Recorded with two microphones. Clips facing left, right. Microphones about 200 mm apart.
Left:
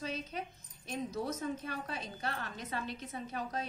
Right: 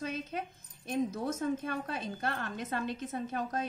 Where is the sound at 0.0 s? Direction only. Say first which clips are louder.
Right 3 dB; 50° right (ahead or behind).